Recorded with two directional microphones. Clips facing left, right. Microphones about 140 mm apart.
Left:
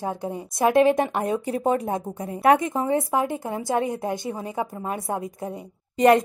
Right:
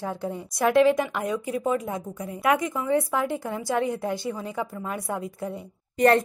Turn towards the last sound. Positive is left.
turn(degrees=20)  # may be behind; listen again after turning